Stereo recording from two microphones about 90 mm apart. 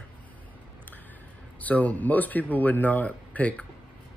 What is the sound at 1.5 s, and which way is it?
Speech, 15° left (ahead or behind).